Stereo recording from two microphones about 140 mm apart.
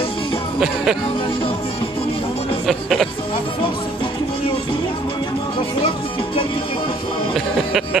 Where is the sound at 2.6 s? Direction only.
Centre (ahead or behind).